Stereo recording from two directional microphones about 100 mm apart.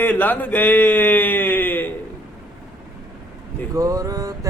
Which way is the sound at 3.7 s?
35° right (ahead or behind).